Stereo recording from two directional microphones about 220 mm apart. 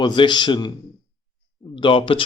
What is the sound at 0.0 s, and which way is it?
Speech, 20° left (ahead or behind).